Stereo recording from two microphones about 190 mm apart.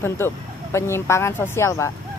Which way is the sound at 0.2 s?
15° left (ahead or behind).